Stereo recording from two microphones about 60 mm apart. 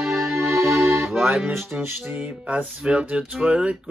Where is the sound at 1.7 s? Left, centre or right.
Right.